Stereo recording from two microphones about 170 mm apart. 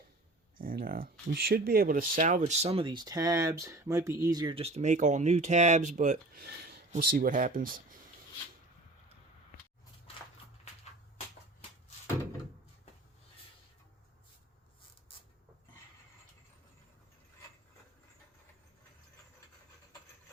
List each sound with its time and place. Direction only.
0.5 s speech: 55° right (ahead or behind); by 4.5 s 20° right (ahead or behind)
4.5 s speech: 40° right (ahead or behind)
6.4 s a sound: 65° right (ahead or behind)
6.9 s speech: 60° right (ahead or behind)